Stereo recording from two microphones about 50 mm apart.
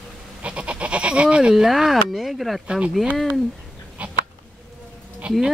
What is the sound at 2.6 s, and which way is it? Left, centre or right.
Speech, centre.